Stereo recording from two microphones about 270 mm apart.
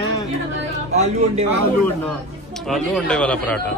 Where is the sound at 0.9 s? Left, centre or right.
Right.